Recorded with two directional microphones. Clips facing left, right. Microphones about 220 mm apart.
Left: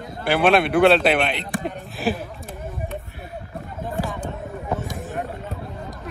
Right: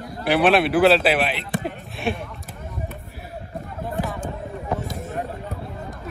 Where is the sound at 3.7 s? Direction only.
Centre (ahead or behind).